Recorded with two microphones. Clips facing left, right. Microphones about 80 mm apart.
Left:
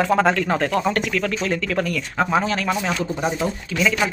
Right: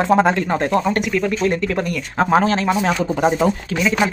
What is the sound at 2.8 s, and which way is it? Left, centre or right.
Speech, right.